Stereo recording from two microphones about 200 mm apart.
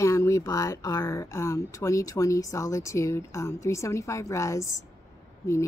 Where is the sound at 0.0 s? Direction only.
15° left (ahead or behind).